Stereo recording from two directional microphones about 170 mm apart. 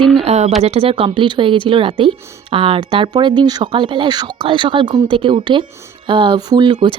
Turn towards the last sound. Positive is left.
turn(degrees=-25)  # may be behind; listen again after turning